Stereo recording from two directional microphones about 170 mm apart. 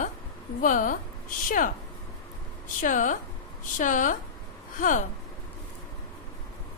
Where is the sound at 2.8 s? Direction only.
50° left (ahead or behind).